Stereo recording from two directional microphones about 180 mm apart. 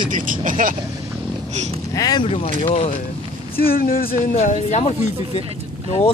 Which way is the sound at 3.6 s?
55° left (ahead or behind).